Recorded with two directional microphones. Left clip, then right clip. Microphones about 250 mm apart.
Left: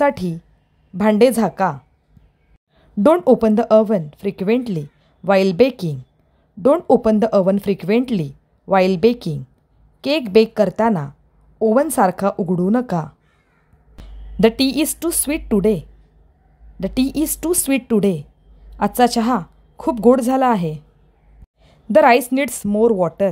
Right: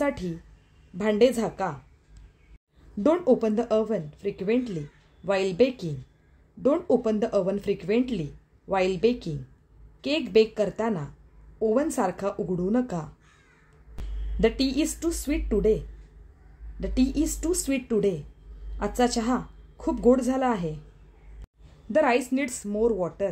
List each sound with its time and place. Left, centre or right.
0.0 s speech: left
3.0 s speech: left
14.4 s speech: left
16.8 s speech: left
21.9 s speech: left